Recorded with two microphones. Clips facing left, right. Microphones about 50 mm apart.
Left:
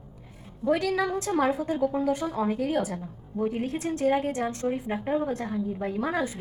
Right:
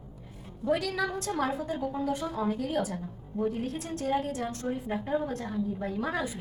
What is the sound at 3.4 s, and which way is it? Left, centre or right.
Speech, left.